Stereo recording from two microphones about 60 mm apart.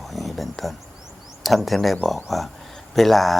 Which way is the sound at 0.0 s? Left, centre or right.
Centre.